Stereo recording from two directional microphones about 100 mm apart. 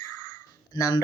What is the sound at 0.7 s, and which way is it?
Speech, 45° left (ahead or behind).